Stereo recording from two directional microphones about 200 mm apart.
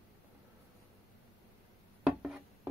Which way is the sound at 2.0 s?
5° right (ahead or behind).